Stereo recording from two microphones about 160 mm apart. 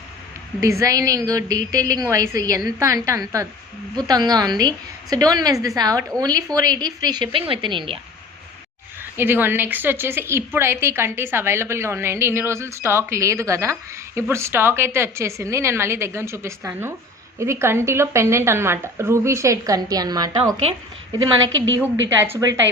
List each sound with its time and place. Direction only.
0.6 s a woman's voice: 20° right (ahead or behind)
9.1 s a woman's voice: 15° right (ahead or behind)
21.8 s a woman's voice: 15° right (ahead or behind)